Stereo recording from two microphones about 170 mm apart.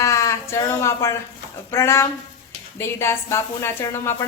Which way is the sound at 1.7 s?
15° left (ahead or behind).